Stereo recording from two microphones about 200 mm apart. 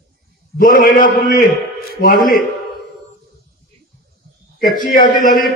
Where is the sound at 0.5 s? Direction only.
45° left (ahead or behind).